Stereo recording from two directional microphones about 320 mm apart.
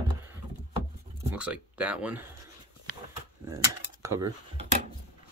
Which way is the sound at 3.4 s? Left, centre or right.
Centre.